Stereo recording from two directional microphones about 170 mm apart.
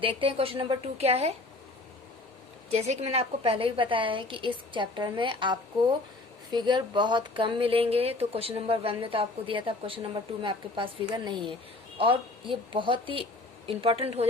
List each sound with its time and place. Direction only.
0.0 s speech: 30° right (ahead or behind)
2.6 s speech: 40° right (ahead or behind)